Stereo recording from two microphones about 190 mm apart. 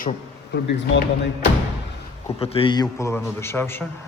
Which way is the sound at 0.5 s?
60° left (ahead or behind).